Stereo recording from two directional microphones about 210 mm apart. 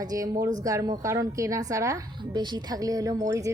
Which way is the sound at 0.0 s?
15° right (ahead or behind).